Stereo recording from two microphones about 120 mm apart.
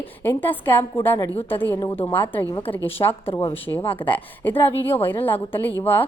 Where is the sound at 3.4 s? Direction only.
50° left (ahead or behind).